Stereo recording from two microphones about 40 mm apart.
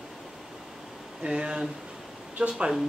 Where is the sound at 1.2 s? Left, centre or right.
Right.